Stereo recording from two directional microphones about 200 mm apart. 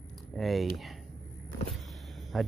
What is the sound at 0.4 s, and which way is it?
Speech, centre (ahead or behind).